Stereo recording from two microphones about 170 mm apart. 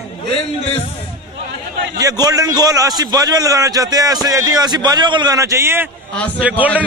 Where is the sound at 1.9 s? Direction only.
20° right (ahead or behind).